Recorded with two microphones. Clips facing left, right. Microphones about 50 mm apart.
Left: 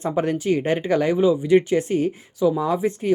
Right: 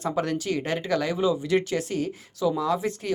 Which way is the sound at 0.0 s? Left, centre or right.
Left.